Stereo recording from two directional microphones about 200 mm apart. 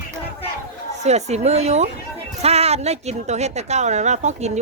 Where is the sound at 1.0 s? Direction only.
35° right (ahead or behind).